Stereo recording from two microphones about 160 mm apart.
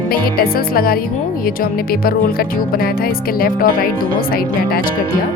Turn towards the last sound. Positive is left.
turn(degrees=60)  # may be behind; listen again after turning